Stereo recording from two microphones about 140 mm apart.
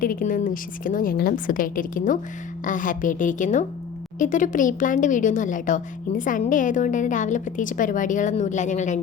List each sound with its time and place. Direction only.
0.0 s a woman's voice: 85° left; by 9.0 s 60° left (ahead or behind)